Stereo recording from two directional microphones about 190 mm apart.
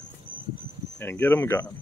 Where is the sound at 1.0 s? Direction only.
10° left (ahead or behind).